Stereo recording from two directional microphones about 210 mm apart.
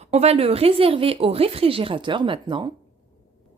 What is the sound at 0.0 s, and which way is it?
Speech, 30° right (ahead or behind).